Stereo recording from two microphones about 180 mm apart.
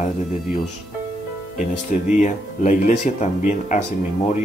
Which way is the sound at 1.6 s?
40° left (ahead or behind).